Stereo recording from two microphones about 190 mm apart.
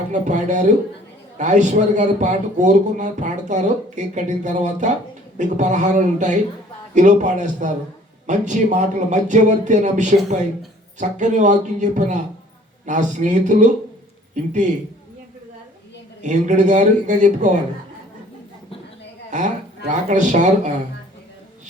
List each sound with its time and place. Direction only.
0.1 s a man's voice: 40° right (ahead or behind)
16.2 s a man's voice: 40° right (ahead or behind)
19.3 s a man's voice: 40° right (ahead or behind)